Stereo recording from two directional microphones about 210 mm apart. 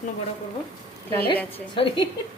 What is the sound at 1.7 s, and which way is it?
Speech, 25° left (ahead or behind).